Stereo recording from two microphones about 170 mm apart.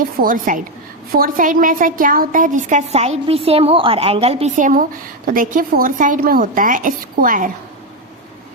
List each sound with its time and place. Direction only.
0.2 s a woman's voice: 55° right (ahead or behind)